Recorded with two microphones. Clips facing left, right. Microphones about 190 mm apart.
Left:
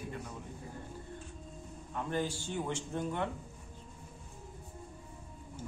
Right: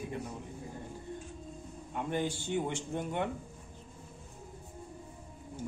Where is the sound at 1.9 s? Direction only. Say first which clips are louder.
Right 1 dB; 15° right (ahead or behind).